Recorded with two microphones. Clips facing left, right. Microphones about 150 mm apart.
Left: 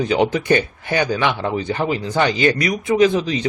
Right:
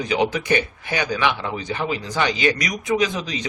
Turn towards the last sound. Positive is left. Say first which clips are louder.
# left 7 dB
turn(degrees=30)  # may be behind; listen again after turning